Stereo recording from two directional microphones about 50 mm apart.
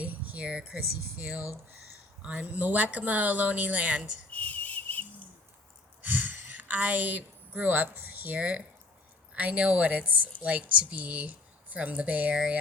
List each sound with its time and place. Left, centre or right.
0.0 s speech: right
4.3 s whistle: left
6.0 s a sound: right
8.4 s speech: right